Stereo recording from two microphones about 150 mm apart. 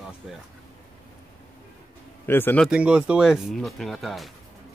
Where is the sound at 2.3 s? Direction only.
15° left (ahead or behind).